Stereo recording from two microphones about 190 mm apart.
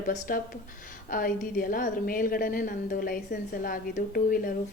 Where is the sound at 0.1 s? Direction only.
45° left (ahead or behind).